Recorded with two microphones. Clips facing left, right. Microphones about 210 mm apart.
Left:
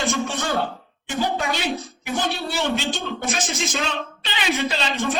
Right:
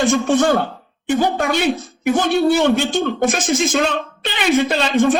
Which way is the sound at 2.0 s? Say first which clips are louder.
Right 11 dB; 50° right (ahead or behind).